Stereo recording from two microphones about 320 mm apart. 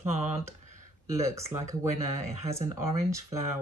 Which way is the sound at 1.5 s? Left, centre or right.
Right.